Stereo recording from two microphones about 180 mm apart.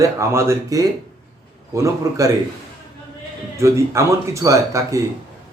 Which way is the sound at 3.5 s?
15° right (ahead or behind).